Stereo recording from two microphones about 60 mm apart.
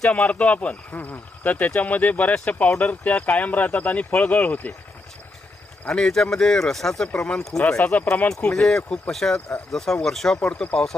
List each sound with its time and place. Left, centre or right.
0.1 s speech: left
5.9 s speech: centre
7.8 s speech: left
8.3 s speech: centre
10.4 s speech: centre